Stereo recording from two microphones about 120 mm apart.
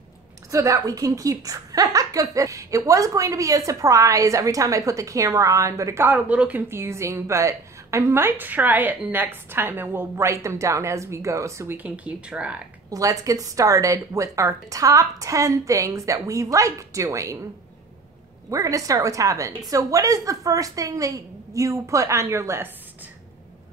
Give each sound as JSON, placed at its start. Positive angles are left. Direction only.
{"t": 0.5, "sound": "a woman's voice", "side_deg": -25}
{"t": 12.9, "sound": "a woman's voice", "side_deg": -30}
{"t": 18.5, "sound": "a woman's voice", "side_deg": -30}